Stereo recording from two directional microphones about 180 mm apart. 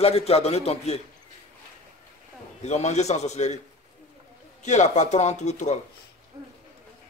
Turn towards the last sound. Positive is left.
turn(degrees=40)  # may be behind; listen again after turning